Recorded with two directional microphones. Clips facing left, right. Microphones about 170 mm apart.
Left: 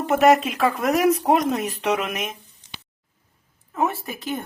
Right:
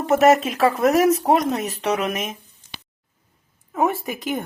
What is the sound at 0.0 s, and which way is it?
Speech, centre (ahead or behind).